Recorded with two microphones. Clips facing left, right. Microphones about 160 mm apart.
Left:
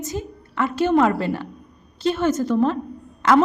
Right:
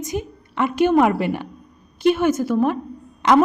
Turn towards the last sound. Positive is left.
turn(degrees=-20)  # may be behind; listen again after turning